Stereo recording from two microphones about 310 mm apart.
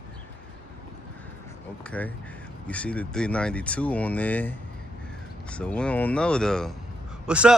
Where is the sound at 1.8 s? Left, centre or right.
Centre.